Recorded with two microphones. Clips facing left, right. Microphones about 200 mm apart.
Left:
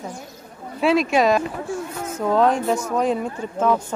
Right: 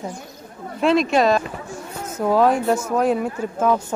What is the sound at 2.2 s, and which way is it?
Speech, 5° right (ahead or behind).